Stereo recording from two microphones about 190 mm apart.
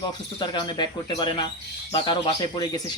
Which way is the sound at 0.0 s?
25° left (ahead or behind).